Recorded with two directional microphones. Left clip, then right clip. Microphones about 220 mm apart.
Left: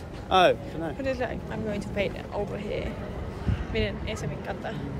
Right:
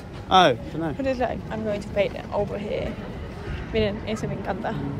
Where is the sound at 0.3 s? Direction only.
30° right (ahead or behind).